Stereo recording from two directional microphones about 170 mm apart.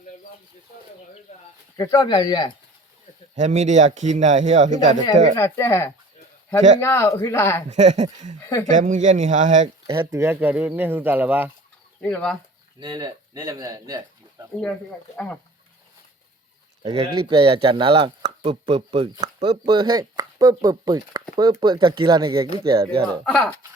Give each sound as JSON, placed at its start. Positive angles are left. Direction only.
{"t": 1.7, "sound": "speech", "side_deg": 20}
{"t": 3.3, "sound": "a man's voice", "side_deg": -45}
{"t": 5.4, "sound": "speech", "side_deg": 15}
{"t": 7.7, "sound": "a man's voice", "side_deg": -40}
{"t": 8.4, "sound": "speech", "side_deg": 15}
{"t": 8.7, "sound": "a man's voice", "side_deg": -45}
{"t": 9.8, "sound": "speech", "side_deg": -20}
{"t": 10.2, "sound": "speech", "side_deg": -10}
{"t": 12.0, "sound": "speech", "side_deg": 5}
{"t": 12.8, "sound": "speech", "side_deg": -25}
{"t": 14.6, "sound": "speech", "side_deg": 10}
{"t": 16.9, "sound": "speech", "side_deg": -30}
{"t": 23.2, "sound": "speech", "side_deg": 5}